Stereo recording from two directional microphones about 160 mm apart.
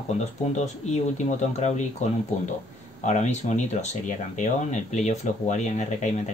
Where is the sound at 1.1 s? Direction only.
50° left (ahead or behind).